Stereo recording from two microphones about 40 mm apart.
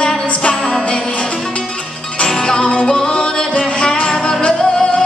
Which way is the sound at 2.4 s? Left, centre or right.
Left.